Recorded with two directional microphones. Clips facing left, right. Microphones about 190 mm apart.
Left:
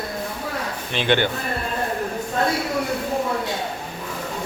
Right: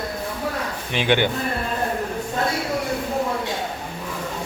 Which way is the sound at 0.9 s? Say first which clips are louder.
Even; 10° right (ahead or behind).